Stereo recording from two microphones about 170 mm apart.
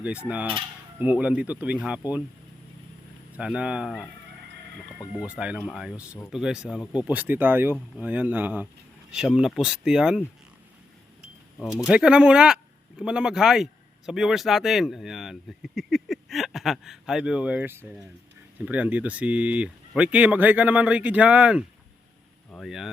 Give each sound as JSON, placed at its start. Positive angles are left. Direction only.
{"t": 0.0, "sound": "speech", "side_deg": -10}
{"t": 3.3, "sound": "speech", "side_deg": -5}
{"t": 5.2, "sound": "speech", "side_deg": -5}
{"t": 11.6, "sound": "speech", "side_deg": 0}